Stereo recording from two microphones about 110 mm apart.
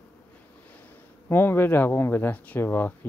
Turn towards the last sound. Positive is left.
turn(degrees=20)  # may be behind; listen again after turning